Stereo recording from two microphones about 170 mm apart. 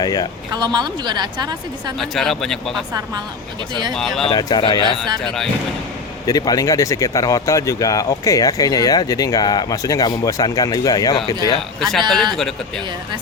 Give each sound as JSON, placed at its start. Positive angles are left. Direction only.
{"t": 0.0, "sound": "speech", "side_deg": 20}
{"t": 0.5, "sound": "a woman's voice", "side_deg": -25}
{"t": 2.0, "sound": "speech", "side_deg": 0}
{"t": 3.9, "sound": "speech", "side_deg": 0}
{"t": 4.3, "sound": "speech", "side_deg": 25}
{"t": 5.2, "sound": "speech", "side_deg": 0}
{"t": 6.2, "sound": "speech", "side_deg": 20}
{"t": 11.8, "sound": "speech", "side_deg": 0}